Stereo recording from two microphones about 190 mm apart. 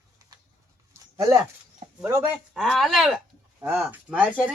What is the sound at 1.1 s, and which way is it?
Speech, 15° right (ahead or behind).